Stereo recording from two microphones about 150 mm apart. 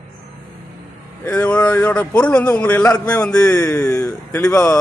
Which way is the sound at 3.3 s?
5° left (ahead or behind).